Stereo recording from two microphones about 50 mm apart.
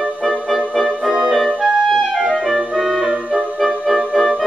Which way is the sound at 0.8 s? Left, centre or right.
Centre.